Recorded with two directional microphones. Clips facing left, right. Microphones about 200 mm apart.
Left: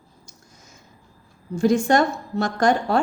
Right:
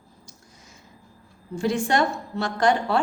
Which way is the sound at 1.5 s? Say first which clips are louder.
Left 5 dB; 40° left (ahead or behind).